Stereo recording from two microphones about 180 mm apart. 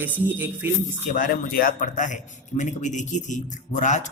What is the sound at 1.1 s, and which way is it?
A man's voice, 45° left (ahead or behind).